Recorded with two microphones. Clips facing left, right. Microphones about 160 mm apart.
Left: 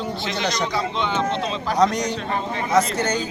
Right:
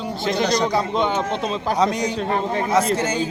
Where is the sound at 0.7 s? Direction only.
45° right (ahead or behind).